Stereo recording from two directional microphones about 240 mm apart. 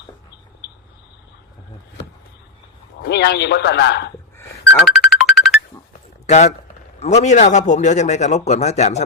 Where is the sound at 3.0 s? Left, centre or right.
Left.